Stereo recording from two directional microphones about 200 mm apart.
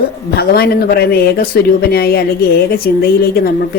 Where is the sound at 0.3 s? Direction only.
50° left (ahead or behind).